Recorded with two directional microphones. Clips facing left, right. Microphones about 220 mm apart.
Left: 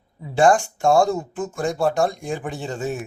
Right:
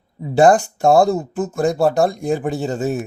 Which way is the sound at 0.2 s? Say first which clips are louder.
Right 4 dB; 35° right (ahead or behind).